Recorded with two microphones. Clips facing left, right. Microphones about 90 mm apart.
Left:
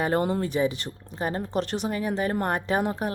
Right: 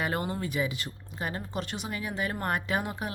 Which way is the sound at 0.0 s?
35° left (ahead or behind).